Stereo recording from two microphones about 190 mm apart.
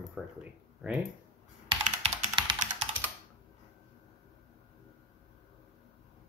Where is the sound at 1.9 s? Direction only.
30° right (ahead or behind).